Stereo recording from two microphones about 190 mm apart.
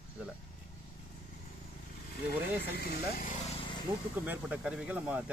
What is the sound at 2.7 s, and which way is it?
Speech, 55° left (ahead or behind).